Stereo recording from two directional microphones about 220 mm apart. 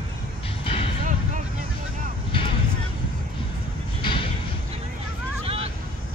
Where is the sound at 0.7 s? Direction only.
25° left (ahead or behind).